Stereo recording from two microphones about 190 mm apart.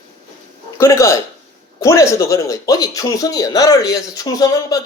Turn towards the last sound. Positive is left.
turn(degrees=20)  # may be behind; listen again after turning